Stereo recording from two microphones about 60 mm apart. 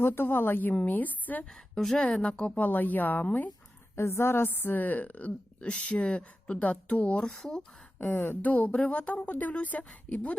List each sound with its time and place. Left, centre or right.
0.0 s a woman's voice: left
1.5 s speech: centre
2.6 s a woman's voice: left
3.9 s a woman's voice: left; by 7.3 s centre
7.3 s speech: centre
7.9 s speech: left
8.4 s a woman's voice: left